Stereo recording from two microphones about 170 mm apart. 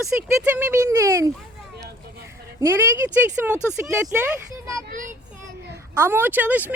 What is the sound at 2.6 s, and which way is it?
Speech, 15° right (ahead or behind).